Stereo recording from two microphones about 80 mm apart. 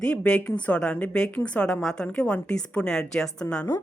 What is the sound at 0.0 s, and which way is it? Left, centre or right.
A woman's voice, centre.